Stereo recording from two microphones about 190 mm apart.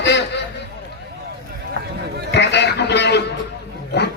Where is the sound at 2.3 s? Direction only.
65° left (ahead or behind).